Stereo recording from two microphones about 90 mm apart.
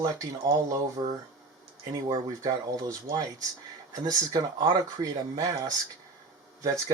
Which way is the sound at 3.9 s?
45° right (ahead or behind).